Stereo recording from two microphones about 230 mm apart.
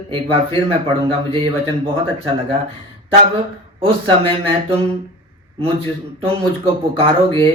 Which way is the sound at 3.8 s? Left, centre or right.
Right.